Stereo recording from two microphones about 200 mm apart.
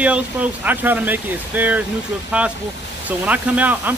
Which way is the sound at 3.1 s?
5° right (ahead or behind).